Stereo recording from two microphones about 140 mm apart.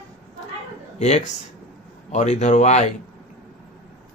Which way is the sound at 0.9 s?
55° left (ahead or behind).